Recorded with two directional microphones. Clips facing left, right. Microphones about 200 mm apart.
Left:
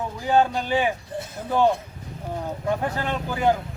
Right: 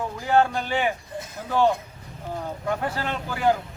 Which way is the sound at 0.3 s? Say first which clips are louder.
Left 1 dB; 15° left (ahead or behind).